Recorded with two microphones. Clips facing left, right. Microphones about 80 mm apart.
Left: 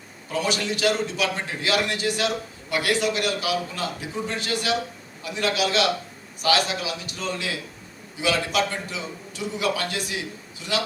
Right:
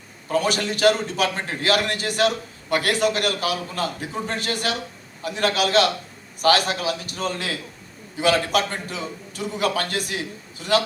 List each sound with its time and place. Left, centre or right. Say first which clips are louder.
0.3 s a man's voice: right 3 dB; right